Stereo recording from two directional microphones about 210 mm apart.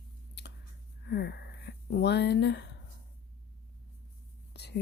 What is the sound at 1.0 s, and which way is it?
Speech, 50° left (ahead or behind).